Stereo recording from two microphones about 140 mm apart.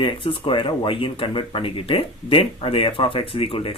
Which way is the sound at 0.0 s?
35° left (ahead or behind).